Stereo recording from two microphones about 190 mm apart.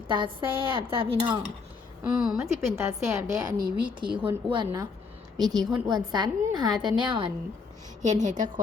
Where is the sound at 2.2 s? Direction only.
Centre (ahead or behind).